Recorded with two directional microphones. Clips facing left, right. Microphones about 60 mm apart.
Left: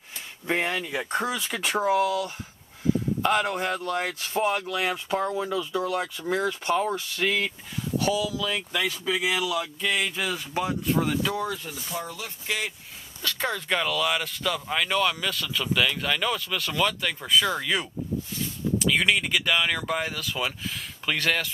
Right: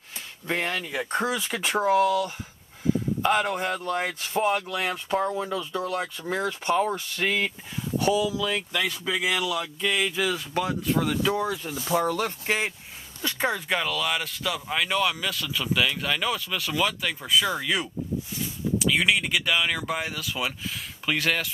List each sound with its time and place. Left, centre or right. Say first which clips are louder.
0.5 s speech: left 2 dB; centre
11.8 s speech: right 9 dB; right
12.4 s speech: right 1 dB; right
13.2 s speech: right 2 dB; centre